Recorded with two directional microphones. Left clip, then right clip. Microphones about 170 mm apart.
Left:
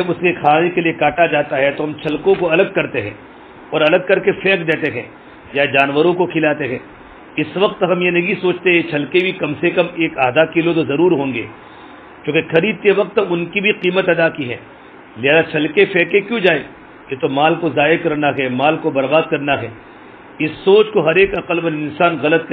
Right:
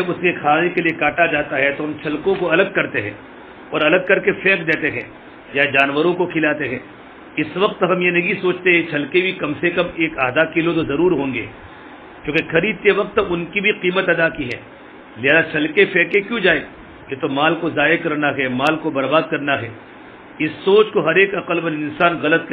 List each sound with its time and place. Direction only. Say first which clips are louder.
0.1 s a man's voice: left 4 dB; 30° left (ahead or behind)